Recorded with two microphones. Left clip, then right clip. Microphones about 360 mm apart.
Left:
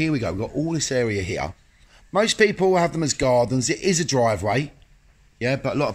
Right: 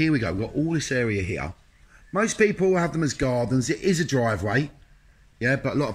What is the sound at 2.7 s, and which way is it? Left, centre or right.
Speech, centre.